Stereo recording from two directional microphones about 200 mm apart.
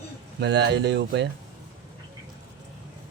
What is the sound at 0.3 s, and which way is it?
Speech, 60° right (ahead or behind).